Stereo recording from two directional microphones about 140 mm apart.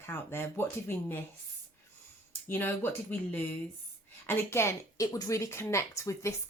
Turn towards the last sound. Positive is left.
turn(degrees=20)  # may be behind; listen again after turning